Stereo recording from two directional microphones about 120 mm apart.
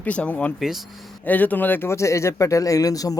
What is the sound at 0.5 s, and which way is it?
Speech, centre (ahead or behind).